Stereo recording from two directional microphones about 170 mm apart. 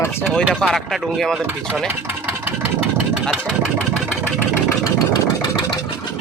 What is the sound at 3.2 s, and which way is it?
Vehicle, 5° right (ahead or behind).